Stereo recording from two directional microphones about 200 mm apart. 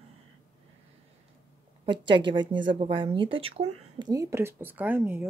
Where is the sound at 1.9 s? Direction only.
25° right (ahead or behind).